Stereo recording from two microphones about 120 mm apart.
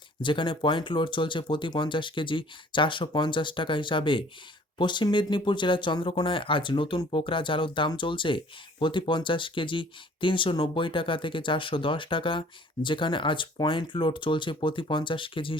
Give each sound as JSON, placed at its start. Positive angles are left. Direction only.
{"t": 0.2, "sound": "speech", "side_deg": 45}